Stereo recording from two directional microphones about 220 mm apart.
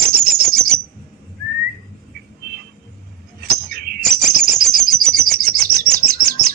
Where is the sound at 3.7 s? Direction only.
45° right (ahead or behind).